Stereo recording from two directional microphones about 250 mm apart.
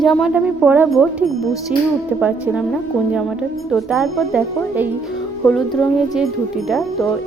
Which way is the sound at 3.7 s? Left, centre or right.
Centre.